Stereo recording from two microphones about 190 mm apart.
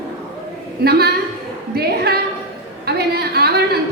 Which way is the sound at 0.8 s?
55° right (ahead or behind).